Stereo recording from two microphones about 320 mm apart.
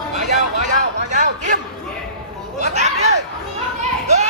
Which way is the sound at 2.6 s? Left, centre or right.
Right.